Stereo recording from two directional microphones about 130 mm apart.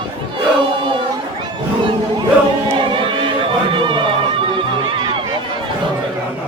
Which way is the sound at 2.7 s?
40° right (ahead or behind).